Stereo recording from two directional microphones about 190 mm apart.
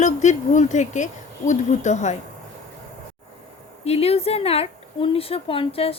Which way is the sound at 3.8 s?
30° left (ahead or behind).